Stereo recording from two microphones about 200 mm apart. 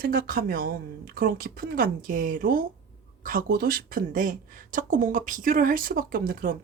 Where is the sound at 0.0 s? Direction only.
45° right (ahead or behind).